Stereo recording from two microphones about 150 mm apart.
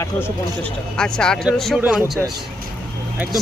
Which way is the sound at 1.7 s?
10° right (ahead or behind).